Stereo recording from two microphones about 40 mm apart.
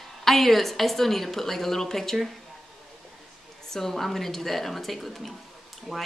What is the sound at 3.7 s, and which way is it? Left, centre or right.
Speech, centre.